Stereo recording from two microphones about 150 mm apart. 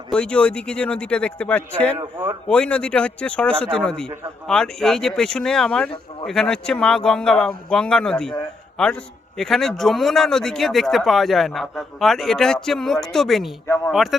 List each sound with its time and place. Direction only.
0.1 s speech: 5° left (ahead or behind)
2.0 s speech: 15° right (ahead or behind)
2.5 s a man's voice: 5° left (ahead or behind)
9.4 s a man's voice: centre (ahead or behind)